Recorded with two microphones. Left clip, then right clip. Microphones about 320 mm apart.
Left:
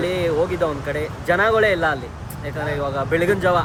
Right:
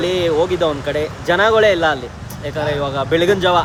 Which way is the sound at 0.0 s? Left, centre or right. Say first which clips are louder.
Right 4 dB; centre.